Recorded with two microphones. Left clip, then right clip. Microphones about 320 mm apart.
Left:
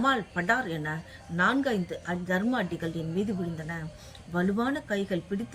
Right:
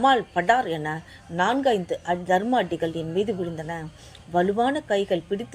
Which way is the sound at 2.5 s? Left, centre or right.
Right.